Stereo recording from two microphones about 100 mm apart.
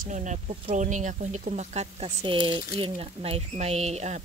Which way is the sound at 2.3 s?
55° right (ahead or behind).